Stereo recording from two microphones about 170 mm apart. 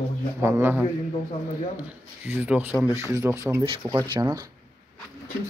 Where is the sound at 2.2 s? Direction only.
10° right (ahead or behind).